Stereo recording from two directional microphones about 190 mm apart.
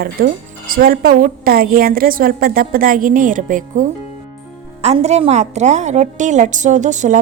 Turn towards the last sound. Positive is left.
turn(degrees=-40)  # may be behind; listen again after turning